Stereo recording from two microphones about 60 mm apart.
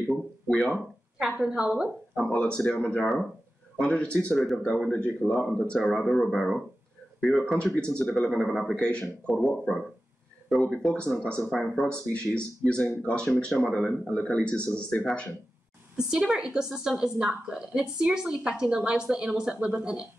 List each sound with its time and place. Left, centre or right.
0.5 s speech: centre
1.2 s a woman's voice: centre
2.1 s speech: centre
4.3 s speech: centre
4.6 s speech: centre
7.5 s speech: centre
8.3 s speech: centre
9.3 s speech: centre
11.6 s speech: centre
11.9 s speech: centre
16.0 s a woman's voice: centre